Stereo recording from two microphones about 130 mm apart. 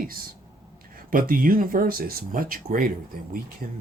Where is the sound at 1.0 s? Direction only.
90° right.